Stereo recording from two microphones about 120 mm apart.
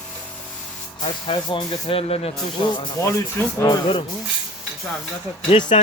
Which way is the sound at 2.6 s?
40° left (ahead or behind).